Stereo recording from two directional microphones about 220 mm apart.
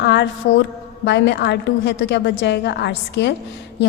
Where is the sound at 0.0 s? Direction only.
50° left (ahead or behind).